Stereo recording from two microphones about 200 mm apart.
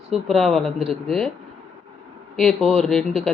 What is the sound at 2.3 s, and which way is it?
Speech, centre (ahead or behind).